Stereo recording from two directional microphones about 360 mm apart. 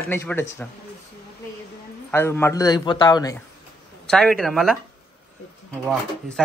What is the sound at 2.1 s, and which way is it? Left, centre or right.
A man's voice, centre.